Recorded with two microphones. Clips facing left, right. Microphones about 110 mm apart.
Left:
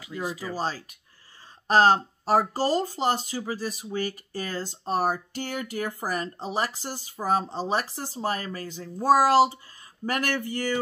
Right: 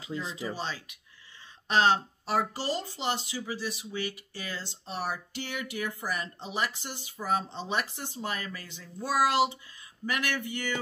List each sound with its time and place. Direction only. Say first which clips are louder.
0.0 s speech: left 3 dB; 25° right (ahead or behind)
0.6 s speech: left 6 dB; 40° left (ahead or behind)